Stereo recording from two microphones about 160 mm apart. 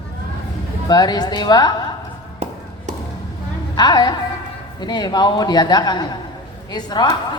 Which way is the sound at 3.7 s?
25° left (ahead or behind).